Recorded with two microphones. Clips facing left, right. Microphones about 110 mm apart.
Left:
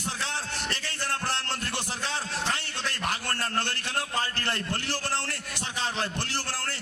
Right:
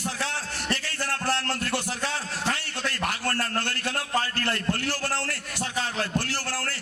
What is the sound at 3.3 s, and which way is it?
A man's voice, 25° left (ahead or behind).